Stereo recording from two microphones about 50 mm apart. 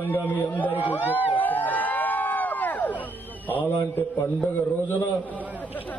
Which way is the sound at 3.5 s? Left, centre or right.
Left.